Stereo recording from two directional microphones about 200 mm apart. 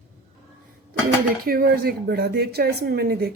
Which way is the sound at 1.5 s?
45° right (ahead or behind).